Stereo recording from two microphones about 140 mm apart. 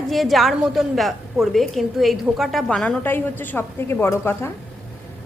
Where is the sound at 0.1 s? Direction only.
Centre (ahead or behind).